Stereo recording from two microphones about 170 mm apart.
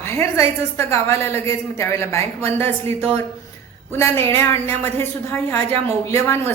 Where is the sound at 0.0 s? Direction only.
15° left (ahead or behind).